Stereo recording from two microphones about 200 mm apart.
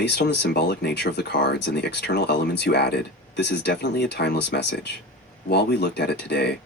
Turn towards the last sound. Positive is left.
turn(degrees=55)  # may be behind; listen again after turning